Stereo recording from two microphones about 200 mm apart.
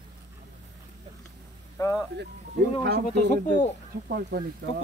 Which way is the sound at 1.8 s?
15° left (ahead or behind).